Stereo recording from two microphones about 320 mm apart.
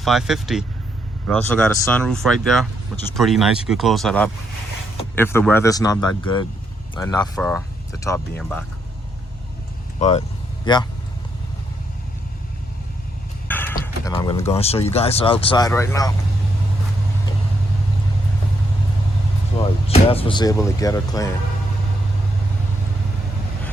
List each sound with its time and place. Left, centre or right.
0.0 s speech: centre
7.3 s speech: centre
10.0 s speech: centre
13.5 s a sound: centre
13.8 s speech: centre
19.6 s speech: centre